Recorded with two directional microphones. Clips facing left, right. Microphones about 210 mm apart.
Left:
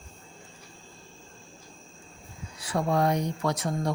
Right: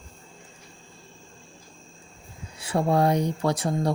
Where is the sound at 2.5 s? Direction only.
25° right (ahead or behind).